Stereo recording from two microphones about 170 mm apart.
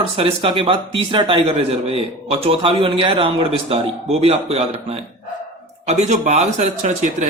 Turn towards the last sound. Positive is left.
turn(degrees=-40)  # may be behind; listen again after turning